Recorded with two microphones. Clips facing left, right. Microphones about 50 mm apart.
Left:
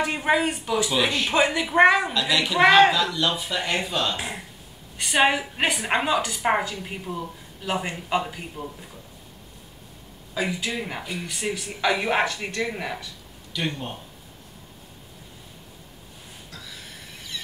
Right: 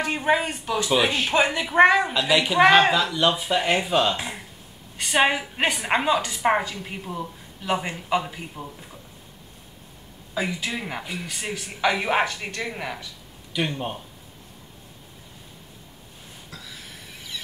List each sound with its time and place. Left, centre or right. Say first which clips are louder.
0.0 s speech: even; centre
0.8 s speech: right 5 dB; centre
1.2 s speech: even; centre
2.1 s speech: right 2 dB; centre
2.6 s speech: left 1 dB; centre
2.9 s speech: right 2 dB; centre
5.1 s speech: even; centre
7.9 s speech: right 1 dB; centre
8.6 s speech: left 3 dB; right
10.4 s speech: left 1 dB; centre
13.5 s a sound: right 2 dB; centre